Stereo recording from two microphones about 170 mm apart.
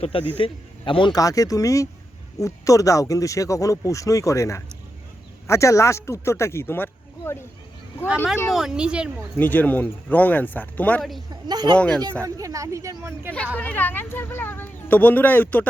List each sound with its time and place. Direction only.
0.0 s a man's voice: 35° left (ahead or behind); by 7.4 s 15° left (ahead or behind)
8.4 s speech: centre (ahead or behind)
9.4 s speech: 10° left (ahead or behind)
11.3 s a woman's voice: 25° right (ahead or behind)
11.8 s speech: 5° left (ahead or behind)
12.2 s speech: 20° right (ahead or behind)
13.6 s speech: 10° left (ahead or behind)